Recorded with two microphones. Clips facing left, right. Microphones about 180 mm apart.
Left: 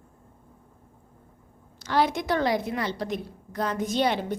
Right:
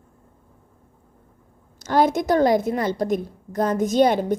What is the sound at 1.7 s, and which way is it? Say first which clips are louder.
A woman's voice: right 5 dB; 45° right (ahead or behind).